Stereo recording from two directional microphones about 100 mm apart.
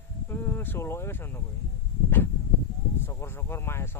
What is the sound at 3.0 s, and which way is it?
Speech, 25° left (ahead or behind).